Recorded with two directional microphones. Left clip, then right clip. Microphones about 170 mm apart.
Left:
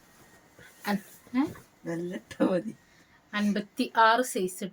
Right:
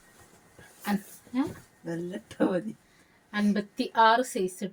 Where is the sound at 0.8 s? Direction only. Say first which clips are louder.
Left 1 dB; 30° left (ahead or behind).